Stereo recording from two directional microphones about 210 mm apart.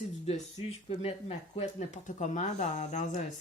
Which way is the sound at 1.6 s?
35° left (ahead or behind).